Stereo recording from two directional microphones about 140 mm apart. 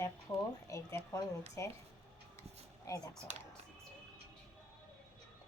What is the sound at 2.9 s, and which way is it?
Speech, 25° left (ahead or behind).